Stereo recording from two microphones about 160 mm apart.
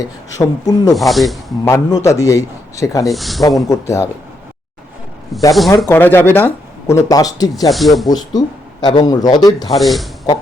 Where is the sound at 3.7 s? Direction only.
20° left (ahead or behind).